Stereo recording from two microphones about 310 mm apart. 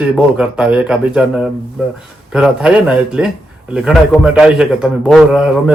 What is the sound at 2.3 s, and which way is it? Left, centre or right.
Speech, centre.